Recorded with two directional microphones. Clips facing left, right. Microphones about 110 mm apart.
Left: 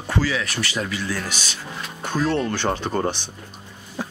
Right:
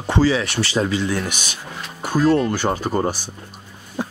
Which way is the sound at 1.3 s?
50° right (ahead or behind).